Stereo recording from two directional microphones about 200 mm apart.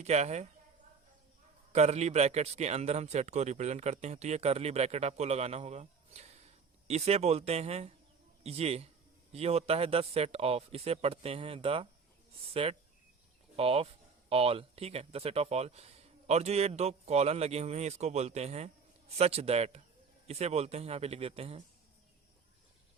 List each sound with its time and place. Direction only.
0.0 s a man's voice: 35° right (ahead or behind)
1.7 s a man's voice: 35° right (ahead or behind)